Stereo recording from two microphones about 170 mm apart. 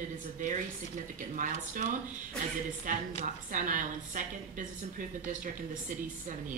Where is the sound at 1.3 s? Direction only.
50° right (ahead or behind).